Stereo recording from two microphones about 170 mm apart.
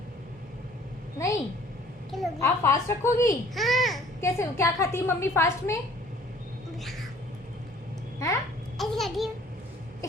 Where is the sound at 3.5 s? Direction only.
Centre (ahead or behind).